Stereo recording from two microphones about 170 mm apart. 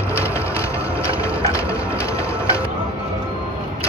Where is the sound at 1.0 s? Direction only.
15° left (ahead or behind).